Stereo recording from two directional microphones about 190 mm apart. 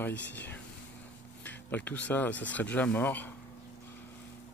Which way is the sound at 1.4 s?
10° left (ahead or behind).